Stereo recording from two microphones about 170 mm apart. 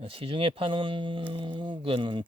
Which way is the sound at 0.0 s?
35° right (ahead or behind).